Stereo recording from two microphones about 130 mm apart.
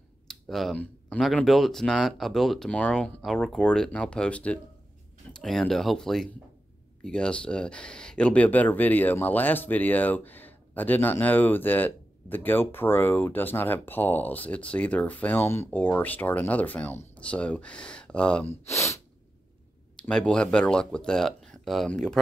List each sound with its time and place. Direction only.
0.3 s a sound: centre (ahead or behind)
0.7 s speech: 5° left (ahead or behind)
18.5 s speech: 20° left (ahead or behind)
20.0 s speech: 5° left (ahead or behind)